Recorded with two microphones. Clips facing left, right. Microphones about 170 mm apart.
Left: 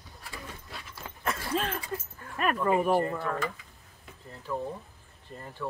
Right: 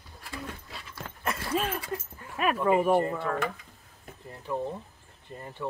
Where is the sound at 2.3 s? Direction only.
5° right (ahead or behind).